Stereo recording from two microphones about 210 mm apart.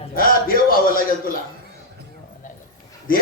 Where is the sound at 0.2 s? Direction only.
45° left (ahead or behind).